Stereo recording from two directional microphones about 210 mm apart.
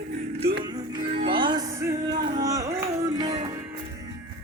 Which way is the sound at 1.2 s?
25° right (ahead or behind).